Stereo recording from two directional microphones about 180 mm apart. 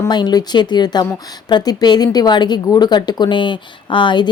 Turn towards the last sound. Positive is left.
turn(degrees=25)  # may be behind; listen again after turning